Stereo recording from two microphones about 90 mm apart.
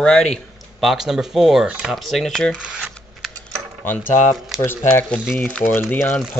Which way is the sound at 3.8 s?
20° left (ahead or behind).